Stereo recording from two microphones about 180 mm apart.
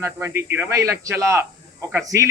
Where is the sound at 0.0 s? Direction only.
15° right (ahead or behind).